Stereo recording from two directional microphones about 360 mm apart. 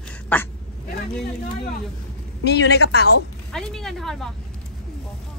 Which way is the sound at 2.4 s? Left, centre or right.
Left.